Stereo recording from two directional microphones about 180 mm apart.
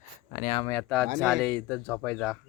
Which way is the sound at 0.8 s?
Centre (ahead or behind).